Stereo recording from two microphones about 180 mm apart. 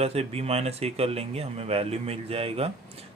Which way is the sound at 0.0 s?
35° right (ahead or behind).